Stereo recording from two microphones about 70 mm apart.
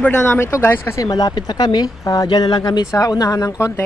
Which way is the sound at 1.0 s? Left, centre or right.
Left.